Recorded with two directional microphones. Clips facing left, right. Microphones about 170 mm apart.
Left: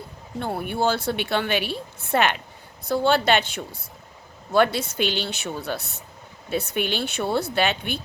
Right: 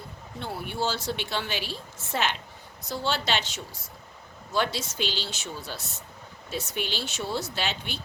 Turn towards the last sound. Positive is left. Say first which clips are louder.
# left 8 dB
turn(degrees=55)  # may be behind; listen again after turning